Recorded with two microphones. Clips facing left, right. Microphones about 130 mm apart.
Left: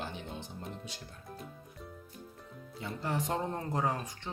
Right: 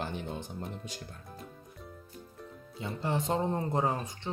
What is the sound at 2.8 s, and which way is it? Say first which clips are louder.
Speech: right 3 dB; 25° right (ahead or behind).